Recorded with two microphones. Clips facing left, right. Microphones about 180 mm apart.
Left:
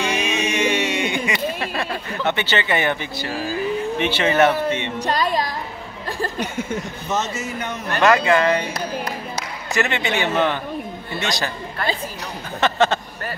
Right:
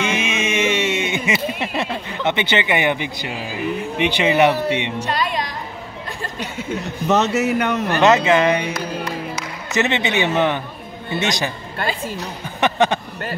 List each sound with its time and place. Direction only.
0.0 s a sound: 20° right (ahead or behind)
4.0 s speech: 15° right (ahead or behind)
5.0 s speech: 35° left (ahead or behind)
7.1 s speech: 65° right (ahead or behind)
8.0 s a man's voice: 20° right (ahead or behind)
9.8 s a man's voice: 20° right (ahead or behind)
12.5 s a sound: 15° right (ahead or behind)